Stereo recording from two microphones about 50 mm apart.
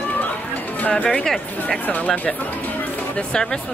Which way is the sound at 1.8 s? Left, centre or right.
Left.